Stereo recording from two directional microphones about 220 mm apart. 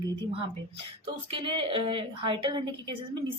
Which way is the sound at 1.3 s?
25° right (ahead or behind).